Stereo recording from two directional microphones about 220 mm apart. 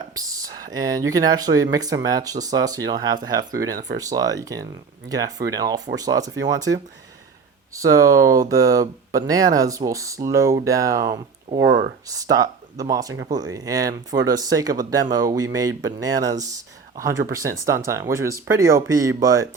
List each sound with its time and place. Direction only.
0.3 s speech: 15° right (ahead or behind)
6.7 s speech: 60° right (ahead or behind)
7.7 s speech: 15° right (ahead or behind)